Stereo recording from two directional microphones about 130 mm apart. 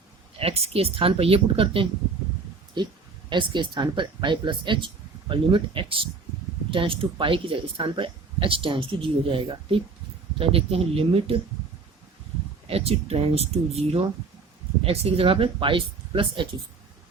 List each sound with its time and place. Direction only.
0.3 s speech: 50° right (ahead or behind)
12.6 s speech: 50° right (ahead or behind)